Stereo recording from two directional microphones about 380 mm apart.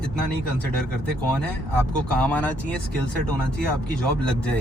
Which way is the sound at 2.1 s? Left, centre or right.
Centre.